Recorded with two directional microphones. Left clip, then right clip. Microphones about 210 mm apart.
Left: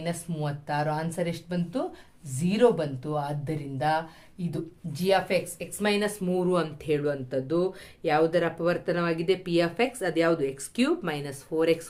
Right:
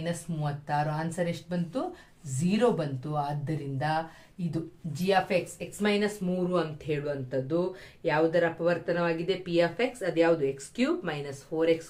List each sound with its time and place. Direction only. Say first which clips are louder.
0.0 s speech: left 2 dB; 45° left (ahead or behind)